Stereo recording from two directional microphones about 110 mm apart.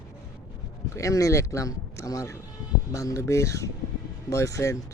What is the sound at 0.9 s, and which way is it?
Speech, 30° left (ahead or behind).